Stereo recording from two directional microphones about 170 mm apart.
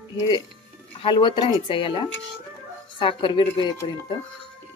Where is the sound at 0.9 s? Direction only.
30° left (ahead or behind).